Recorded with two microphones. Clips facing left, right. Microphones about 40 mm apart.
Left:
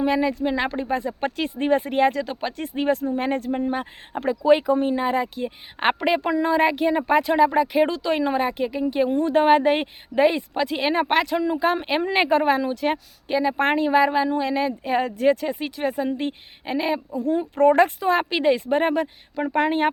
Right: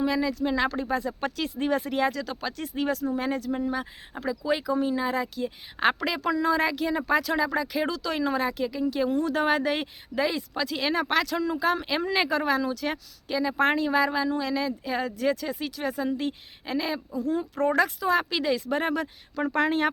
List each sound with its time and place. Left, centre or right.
0.0 s speech: left
2.2 s speech: left
2.5 s speech: left
19.4 s speech: centre